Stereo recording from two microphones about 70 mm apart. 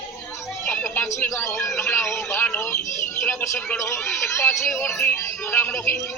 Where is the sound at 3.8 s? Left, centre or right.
Left.